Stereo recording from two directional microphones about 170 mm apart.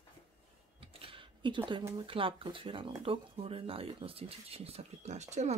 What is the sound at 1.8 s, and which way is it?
Speech, 30° right (ahead or behind).